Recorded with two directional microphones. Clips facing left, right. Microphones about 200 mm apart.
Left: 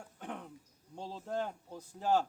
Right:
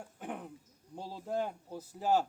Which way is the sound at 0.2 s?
5° right (ahead or behind).